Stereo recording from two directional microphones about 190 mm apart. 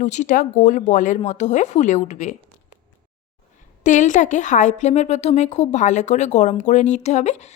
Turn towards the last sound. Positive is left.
turn(degrees=35)  # may be behind; listen again after turning